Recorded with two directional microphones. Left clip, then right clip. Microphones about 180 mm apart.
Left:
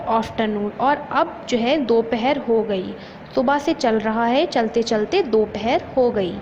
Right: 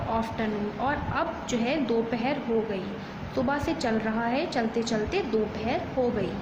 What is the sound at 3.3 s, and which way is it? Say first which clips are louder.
A woman's voice: left 9 dB; 35° left (ahead or behind).